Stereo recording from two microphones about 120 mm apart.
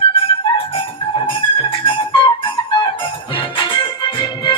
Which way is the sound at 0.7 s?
45° left (ahead or behind).